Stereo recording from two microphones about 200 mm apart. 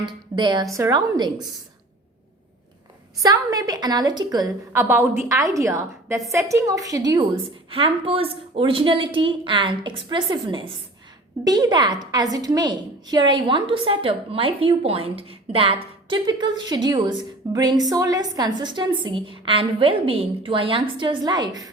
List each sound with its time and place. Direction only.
0.1 s a woman's voice: 25° right (ahead or behind)
3.2 s a woman's voice: 20° right (ahead or behind)